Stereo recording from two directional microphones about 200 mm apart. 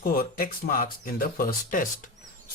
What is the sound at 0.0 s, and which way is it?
Speech, 45° left (ahead or behind).